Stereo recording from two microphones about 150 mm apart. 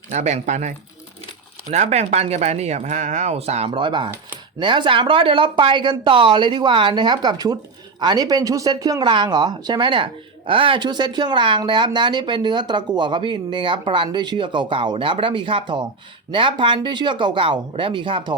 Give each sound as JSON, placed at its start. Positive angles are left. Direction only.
{"t": 0.1, "sound": "speech", "side_deg": -50}
{"t": 1.7, "sound": "speech", "side_deg": -50}